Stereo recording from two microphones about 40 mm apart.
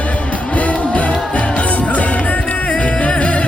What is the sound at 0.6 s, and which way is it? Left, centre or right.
Music, left.